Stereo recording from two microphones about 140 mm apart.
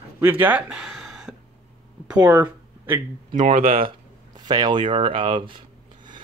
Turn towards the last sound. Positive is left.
turn(degrees=-35)  # may be behind; listen again after turning